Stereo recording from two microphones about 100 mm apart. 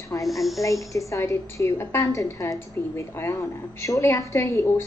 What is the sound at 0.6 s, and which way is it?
A woman's voice, 35° left (ahead or behind).